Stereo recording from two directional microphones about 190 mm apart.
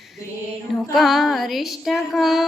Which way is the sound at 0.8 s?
Centre (ahead or behind).